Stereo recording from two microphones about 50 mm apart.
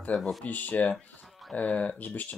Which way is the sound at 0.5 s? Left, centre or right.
Left.